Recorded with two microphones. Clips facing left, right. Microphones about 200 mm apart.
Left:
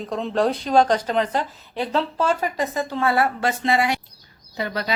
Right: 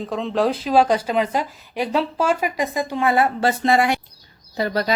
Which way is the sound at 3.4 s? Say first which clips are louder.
Right 3 dB; 40° right (ahead or behind).